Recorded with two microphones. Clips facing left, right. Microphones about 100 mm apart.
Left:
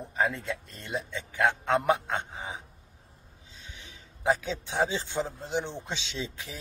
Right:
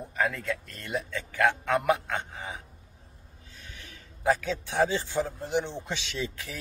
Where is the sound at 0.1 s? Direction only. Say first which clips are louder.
Even; 25° left (ahead or behind).